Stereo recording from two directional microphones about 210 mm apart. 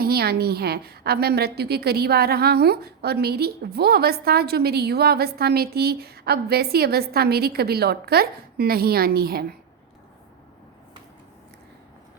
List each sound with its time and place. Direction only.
0.0 s a woman's voice: 50° right (ahead or behind)